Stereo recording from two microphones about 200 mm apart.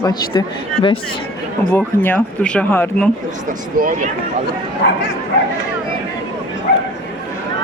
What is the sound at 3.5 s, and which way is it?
Speech, 40° right (ahead or behind).